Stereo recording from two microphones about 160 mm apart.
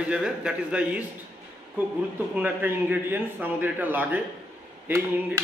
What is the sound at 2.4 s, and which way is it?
A man's voice, 10° right (ahead or behind).